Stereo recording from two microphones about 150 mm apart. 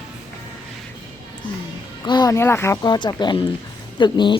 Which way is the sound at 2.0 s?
30° left (ahead or behind).